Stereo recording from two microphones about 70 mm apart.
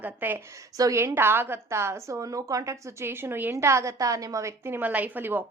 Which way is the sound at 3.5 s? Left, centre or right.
Right.